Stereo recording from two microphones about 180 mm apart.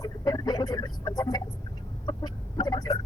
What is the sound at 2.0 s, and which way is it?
Chicken, 25° left (ahead or behind).